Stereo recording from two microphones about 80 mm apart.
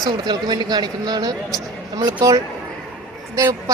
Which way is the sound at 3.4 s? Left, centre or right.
Right.